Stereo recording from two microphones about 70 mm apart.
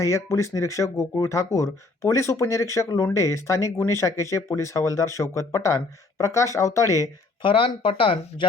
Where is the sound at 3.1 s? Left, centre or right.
Left.